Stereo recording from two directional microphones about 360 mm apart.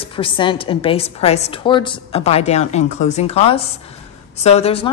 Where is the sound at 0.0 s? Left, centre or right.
Centre.